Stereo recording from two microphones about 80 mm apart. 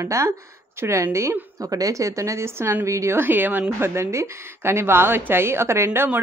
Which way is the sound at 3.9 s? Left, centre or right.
Right.